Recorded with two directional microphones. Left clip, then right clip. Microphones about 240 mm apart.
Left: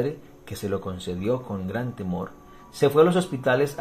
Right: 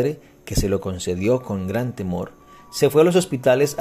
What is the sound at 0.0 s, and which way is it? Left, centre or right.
Speech, right.